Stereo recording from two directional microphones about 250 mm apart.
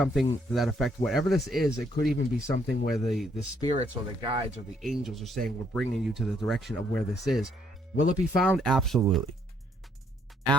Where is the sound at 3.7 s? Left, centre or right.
Right.